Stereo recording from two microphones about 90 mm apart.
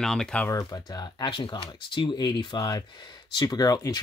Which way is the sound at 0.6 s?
45° left (ahead or behind).